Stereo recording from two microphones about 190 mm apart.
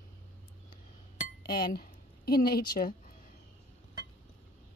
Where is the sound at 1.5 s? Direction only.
55° left (ahead or behind).